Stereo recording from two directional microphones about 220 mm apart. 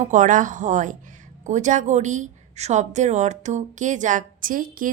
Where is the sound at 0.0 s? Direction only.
35° right (ahead or behind).